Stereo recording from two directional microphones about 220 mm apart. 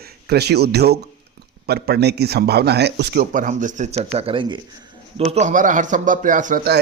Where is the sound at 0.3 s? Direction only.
45° right (ahead or behind).